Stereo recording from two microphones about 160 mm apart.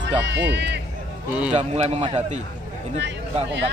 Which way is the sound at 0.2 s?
90° right.